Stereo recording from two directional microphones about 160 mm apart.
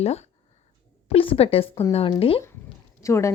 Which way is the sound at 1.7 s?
20° left (ahead or behind).